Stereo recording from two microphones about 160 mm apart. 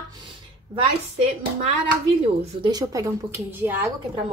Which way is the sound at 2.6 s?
25° right (ahead or behind).